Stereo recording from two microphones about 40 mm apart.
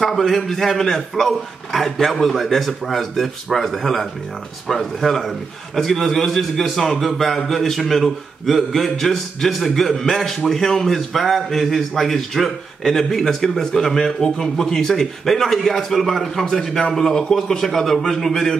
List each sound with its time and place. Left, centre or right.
0.0 s a man's voice: centre